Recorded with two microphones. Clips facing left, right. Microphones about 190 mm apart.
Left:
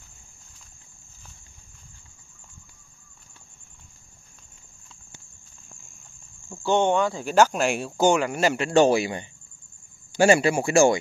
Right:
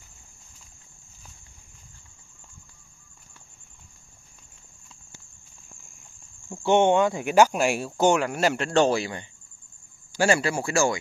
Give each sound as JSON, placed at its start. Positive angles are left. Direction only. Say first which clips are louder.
{"t": 6.6, "sound": "speech", "louder": "right 2 dB", "side_deg": -20}